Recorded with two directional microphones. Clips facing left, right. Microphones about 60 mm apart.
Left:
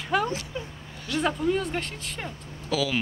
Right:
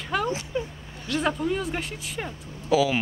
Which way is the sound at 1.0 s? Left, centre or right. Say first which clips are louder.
Even; centre.